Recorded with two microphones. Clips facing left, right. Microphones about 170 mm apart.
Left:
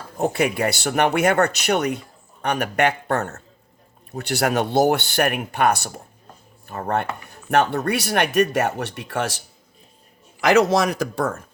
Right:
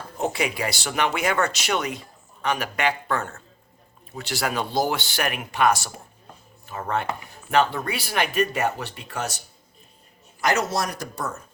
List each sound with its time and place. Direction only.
0.2 s speech: 55° left (ahead or behind)
3.2 s a man's voice: 45° left (ahead or behind)
4.2 s speech: 60° left (ahead or behind); by 9.3 s 90° left
10.7 s speech: 90° left